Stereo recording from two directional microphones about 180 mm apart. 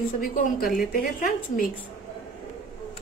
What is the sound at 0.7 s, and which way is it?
Speech, 50° left (ahead or behind).